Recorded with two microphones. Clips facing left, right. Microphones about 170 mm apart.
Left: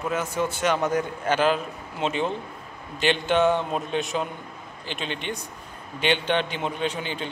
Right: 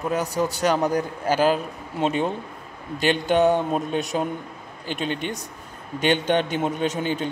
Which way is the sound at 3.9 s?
45° right (ahead or behind).